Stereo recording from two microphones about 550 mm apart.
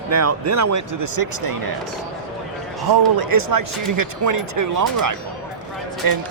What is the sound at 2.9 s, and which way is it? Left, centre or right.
A man's voice, right.